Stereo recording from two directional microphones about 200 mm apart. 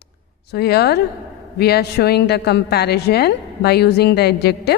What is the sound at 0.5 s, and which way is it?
A woman's voice, 55° left (ahead or behind).